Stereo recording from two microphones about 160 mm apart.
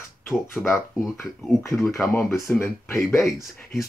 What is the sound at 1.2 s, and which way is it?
Speech, centre (ahead or behind).